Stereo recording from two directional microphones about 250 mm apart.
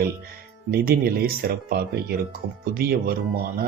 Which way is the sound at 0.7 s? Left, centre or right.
Right.